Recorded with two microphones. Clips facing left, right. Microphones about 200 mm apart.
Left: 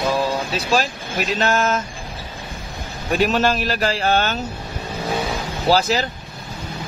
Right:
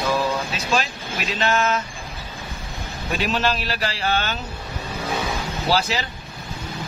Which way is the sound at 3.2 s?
50° left (ahead or behind).